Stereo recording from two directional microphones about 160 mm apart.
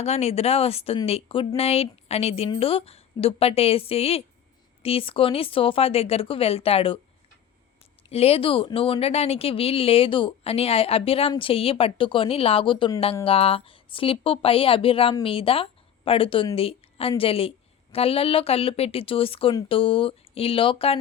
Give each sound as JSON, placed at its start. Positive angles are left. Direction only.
{"t": 0.0, "sound": "speech", "side_deg": 40}
{"t": 8.1, "sound": "a woman's voice", "side_deg": 40}